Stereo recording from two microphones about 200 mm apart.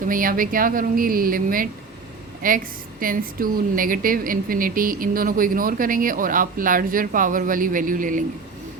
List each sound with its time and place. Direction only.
0.1 s speech: 45° right (ahead or behind)